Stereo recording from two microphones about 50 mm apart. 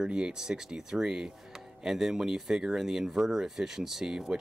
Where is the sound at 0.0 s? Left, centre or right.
Centre.